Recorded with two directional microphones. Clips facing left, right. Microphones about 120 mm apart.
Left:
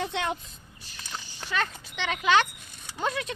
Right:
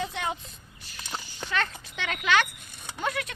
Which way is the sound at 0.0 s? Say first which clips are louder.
Left 2 dB; 70° left (ahead or behind).